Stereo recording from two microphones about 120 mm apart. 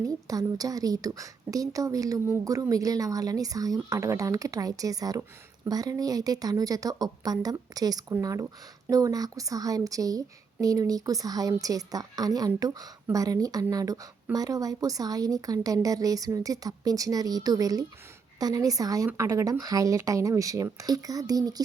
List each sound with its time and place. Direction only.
0.0 s a woman's voice: 30° right (ahead or behind)